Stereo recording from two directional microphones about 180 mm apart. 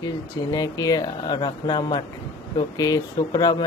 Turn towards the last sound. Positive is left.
turn(degrees=20)  # may be behind; listen again after turning